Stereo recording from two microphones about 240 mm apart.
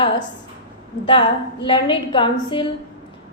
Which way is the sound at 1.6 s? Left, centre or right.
Centre.